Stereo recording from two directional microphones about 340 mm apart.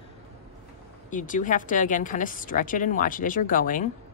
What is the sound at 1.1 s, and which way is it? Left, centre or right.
A woman's voice, left.